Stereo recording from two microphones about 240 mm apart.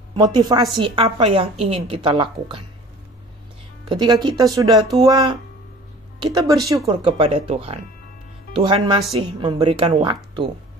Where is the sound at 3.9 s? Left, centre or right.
Centre.